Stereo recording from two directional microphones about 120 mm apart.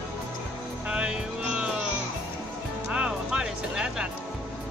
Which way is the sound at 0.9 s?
10° right (ahead or behind).